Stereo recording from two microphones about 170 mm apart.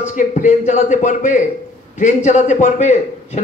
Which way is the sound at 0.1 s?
50° left (ahead or behind).